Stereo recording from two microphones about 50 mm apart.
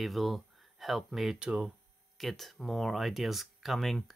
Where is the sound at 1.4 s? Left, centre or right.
Centre.